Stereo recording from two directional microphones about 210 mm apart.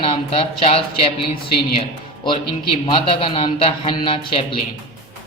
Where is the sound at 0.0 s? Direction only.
25° left (ahead or behind).